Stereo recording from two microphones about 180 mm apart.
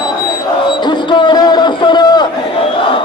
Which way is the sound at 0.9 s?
25° left (ahead or behind).